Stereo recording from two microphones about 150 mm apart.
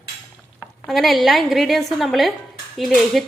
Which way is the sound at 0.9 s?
Centre (ahead or behind).